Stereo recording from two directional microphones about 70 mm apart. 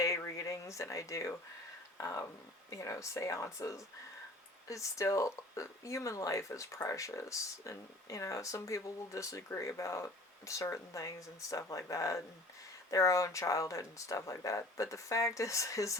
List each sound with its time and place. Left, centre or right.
0.3 s speech: left